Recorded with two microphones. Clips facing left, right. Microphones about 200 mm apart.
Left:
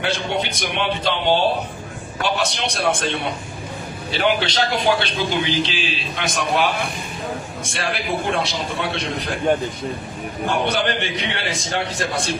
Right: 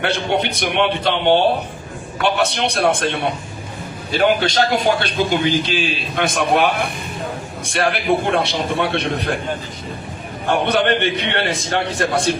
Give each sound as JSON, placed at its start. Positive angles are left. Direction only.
{"t": 0.0, "sound": "a man's voice", "side_deg": -60}
{"t": 10.5, "sound": "a man's voice", "side_deg": -60}